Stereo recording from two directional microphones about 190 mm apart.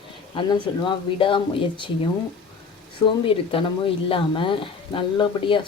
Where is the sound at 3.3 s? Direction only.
30° left (ahead or behind).